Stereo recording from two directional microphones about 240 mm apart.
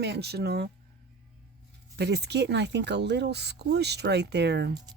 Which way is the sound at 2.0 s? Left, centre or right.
Right.